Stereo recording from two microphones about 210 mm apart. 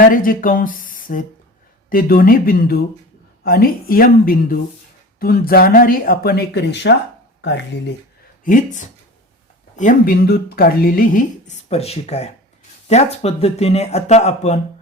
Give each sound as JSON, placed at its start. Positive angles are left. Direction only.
{"t": 0.0, "sound": "speech", "side_deg": 40}
{"t": 8.4, "sound": "speech", "side_deg": 40}